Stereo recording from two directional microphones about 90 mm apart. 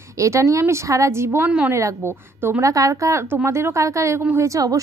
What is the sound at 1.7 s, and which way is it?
Speech, 30° right (ahead or behind).